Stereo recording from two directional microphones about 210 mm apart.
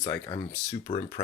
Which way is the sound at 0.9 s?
20° left (ahead or behind).